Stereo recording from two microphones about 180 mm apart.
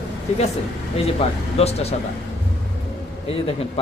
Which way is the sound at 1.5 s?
35° left (ahead or behind).